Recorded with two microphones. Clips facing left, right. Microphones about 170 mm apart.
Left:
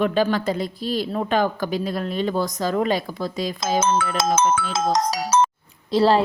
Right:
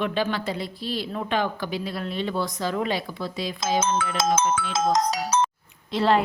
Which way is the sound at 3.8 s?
65° left (ahead or behind).